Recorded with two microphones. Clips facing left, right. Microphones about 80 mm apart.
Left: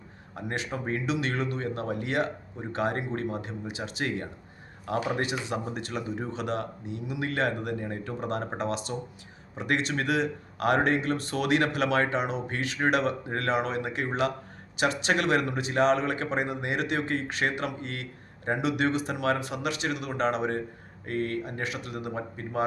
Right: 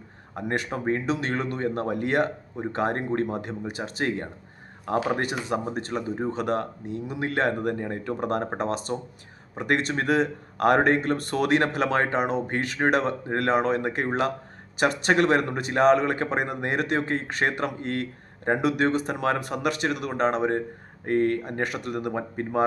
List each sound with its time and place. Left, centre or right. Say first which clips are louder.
0.3 s speech: right 5 dB; right